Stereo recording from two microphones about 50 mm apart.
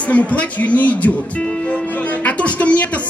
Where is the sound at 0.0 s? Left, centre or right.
Left.